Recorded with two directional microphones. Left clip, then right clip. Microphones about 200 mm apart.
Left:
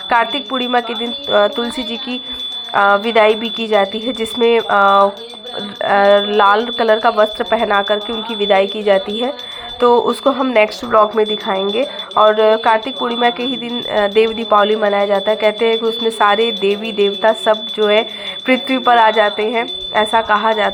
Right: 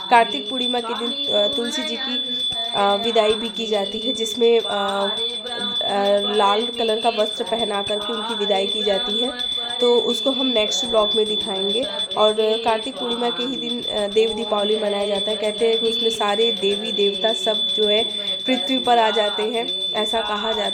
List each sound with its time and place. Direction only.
0.1 s speech: centre (ahead or behind)
3.1 s speech: centre (ahead or behind)
9.9 s speech: 25° left (ahead or behind)
10.2 s speech: centre (ahead or behind)
13.9 s speech: centre (ahead or behind)